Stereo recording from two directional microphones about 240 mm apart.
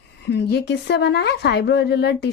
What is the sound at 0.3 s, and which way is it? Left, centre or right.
Speech, left.